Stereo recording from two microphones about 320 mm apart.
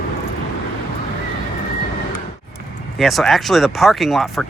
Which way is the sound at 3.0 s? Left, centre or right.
Centre.